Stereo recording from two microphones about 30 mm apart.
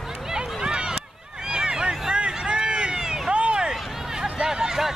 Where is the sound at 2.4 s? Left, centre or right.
Right.